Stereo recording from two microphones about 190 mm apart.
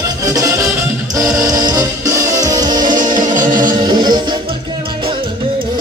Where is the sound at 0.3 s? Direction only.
15° right (ahead or behind).